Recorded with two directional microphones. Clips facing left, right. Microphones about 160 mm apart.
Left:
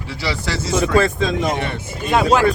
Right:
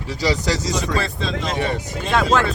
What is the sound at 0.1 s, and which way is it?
Speech, 15° right (ahead or behind).